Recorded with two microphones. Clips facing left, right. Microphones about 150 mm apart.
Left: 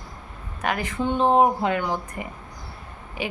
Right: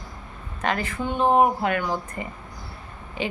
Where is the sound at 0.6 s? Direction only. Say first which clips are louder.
Left 1 dB; 15° left (ahead or behind).